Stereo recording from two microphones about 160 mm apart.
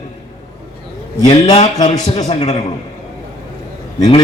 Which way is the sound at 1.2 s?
30° left (ahead or behind).